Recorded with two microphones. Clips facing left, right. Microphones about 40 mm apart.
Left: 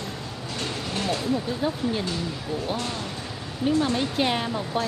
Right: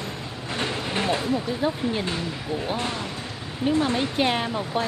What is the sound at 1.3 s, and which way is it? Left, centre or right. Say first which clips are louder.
Speech: right 1 dB; centre.